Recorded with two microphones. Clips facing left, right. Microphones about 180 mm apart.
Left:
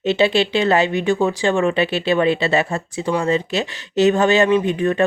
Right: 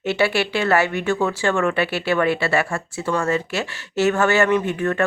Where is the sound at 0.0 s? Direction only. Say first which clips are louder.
Left 4 dB; 20° left (ahead or behind).